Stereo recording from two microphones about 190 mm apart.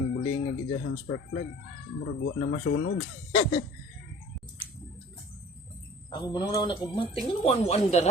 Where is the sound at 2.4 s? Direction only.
90° left.